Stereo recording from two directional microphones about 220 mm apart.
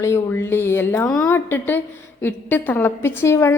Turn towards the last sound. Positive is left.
turn(degrees=10)  # may be behind; listen again after turning